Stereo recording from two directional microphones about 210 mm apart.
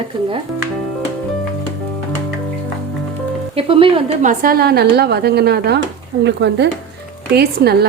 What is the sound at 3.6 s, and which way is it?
A woman's voice, 25° right (ahead or behind).